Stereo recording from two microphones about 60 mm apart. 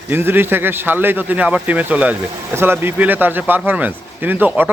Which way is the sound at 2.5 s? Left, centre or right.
Right.